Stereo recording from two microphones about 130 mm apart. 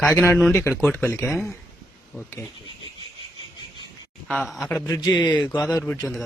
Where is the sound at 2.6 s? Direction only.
40° right (ahead or behind).